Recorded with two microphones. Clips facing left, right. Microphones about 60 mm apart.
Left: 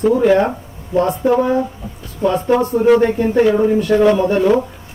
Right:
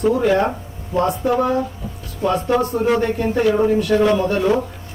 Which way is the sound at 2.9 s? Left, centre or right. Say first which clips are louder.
Left 5 dB; centre.